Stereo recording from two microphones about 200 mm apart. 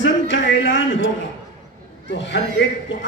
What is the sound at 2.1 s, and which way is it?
Speech, 65° left (ahead or behind).